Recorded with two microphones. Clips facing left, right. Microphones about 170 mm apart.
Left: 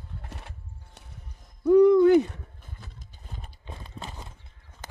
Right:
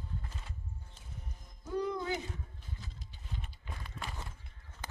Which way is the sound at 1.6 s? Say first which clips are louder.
Left 19 dB; 70° left (ahead or behind).